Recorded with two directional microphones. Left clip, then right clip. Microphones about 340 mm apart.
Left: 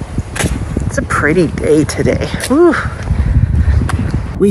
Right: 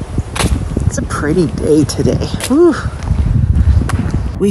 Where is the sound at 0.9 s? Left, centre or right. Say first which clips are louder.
Left 5 dB; centre.